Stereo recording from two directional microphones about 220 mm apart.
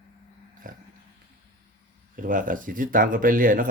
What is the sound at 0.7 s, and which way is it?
Dog, 40° right (ahead or behind).